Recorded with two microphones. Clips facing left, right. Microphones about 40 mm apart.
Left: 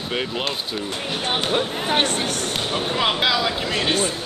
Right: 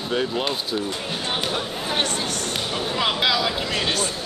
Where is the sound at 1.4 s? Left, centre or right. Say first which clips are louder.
Left 4 dB; left.